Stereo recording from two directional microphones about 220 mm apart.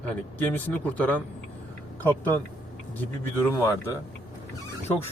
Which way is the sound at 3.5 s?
10° left (ahead or behind).